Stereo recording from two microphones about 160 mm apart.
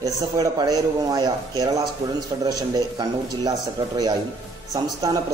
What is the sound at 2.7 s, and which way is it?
Speech, 25° right (ahead or behind).